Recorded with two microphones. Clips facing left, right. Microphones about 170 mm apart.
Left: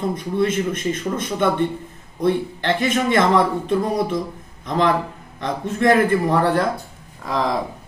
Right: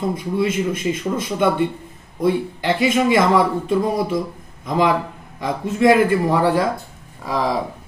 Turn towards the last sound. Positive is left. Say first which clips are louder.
# right 1 dB
turn(degrees=-10)  # may be behind; listen again after turning